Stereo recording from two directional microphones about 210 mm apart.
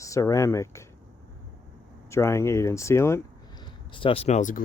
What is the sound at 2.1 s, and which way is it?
Speech, 10° left (ahead or behind).